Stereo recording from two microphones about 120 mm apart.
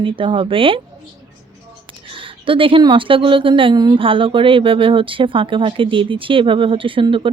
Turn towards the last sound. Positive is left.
turn(degrees=-45)  # may be behind; listen again after turning